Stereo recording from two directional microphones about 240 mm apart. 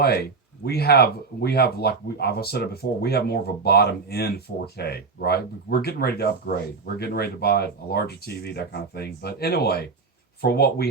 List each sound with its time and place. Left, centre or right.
0.0 s speech: left